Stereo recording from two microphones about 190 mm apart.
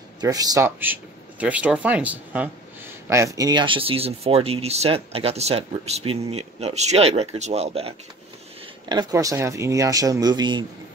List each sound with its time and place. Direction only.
0.2 s speech: 20° right (ahead or behind)
8.8 s speech: 20° right (ahead or behind)